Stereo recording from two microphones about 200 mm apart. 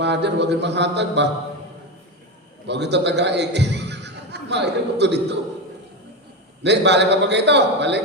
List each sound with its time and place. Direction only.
0.0 s a man's voice: 60° right (ahead or behind)
2.6 s a man's voice: 60° right (ahead or behind)
6.6 s a man's voice: 60° right (ahead or behind)